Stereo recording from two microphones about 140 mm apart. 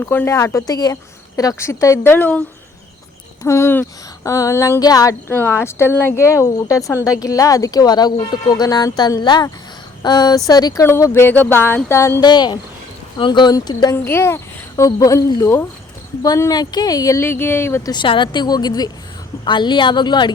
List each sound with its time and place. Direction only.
0.0 s speech: 15° left (ahead or behind)
3.4 s speech: 20° left (ahead or behind)
5.3 s speech: 15° left (ahead or behind)
12.2 s a woman's voice: 30° left (ahead or behind)
13.9 s speech: 15° left (ahead or behind)
17.9 s a woman's voice: 35° left (ahead or behind)